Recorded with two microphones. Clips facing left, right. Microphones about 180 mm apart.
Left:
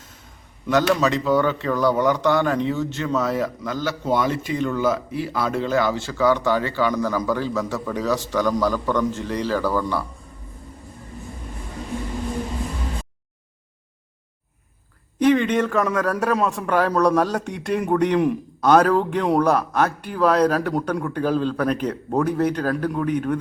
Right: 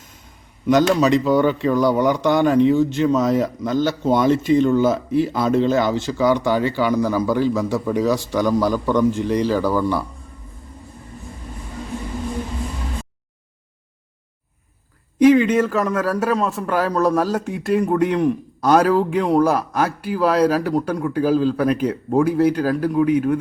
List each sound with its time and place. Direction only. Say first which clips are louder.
0.7 s speech: right 4 dB; 15° right (ahead or behind)
15.2 s a sound: right 4 dB; 5° right (ahead or behind)
15.9 s a man's voice: right 1 dB; 5° right (ahead or behind)